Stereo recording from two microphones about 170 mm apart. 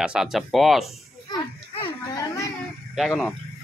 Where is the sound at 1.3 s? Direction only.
25° left (ahead or behind).